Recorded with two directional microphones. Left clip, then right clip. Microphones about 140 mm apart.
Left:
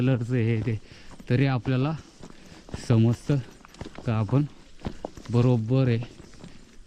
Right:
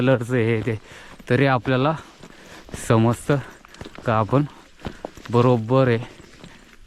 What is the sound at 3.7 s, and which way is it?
Run, centre (ahead or behind).